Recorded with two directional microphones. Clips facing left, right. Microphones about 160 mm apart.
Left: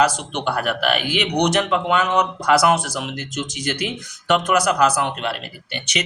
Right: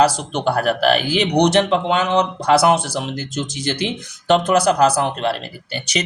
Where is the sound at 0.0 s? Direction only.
35° right (ahead or behind).